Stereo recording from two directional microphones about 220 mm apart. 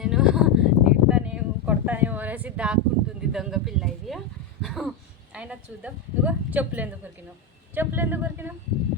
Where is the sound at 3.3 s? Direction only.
Centre (ahead or behind).